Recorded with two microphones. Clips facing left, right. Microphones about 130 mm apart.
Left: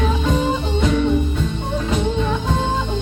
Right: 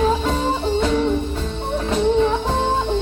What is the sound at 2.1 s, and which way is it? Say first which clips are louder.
Music: right 3 dB; 30° right (ahead or behind).